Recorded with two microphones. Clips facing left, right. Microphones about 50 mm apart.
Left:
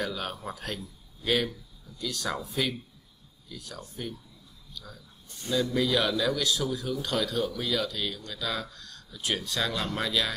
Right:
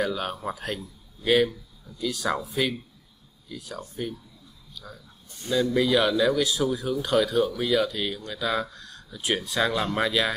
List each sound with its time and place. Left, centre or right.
0.0 s a man's voice: centre